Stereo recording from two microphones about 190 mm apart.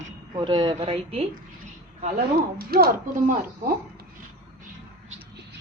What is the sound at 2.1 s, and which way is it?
Speech, 55° right (ahead or behind).